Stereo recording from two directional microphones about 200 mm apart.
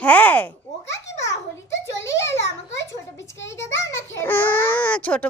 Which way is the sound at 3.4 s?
65° left (ahead or behind).